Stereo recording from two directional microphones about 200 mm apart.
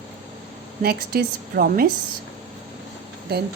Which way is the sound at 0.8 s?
50° right (ahead or behind).